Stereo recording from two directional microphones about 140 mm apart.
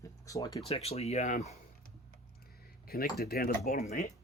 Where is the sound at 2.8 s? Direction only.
90° left.